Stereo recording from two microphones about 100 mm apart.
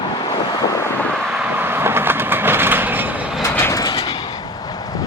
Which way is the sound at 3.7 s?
35° left (ahead or behind).